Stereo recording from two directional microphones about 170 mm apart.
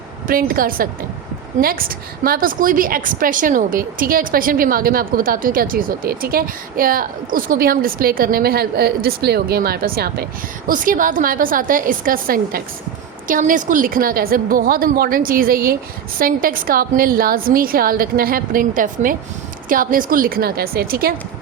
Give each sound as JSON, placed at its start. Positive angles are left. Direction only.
{"t": 0.3, "sound": "a woman's voice", "side_deg": -55}
{"t": 10.7, "sound": "a woman's voice", "side_deg": -50}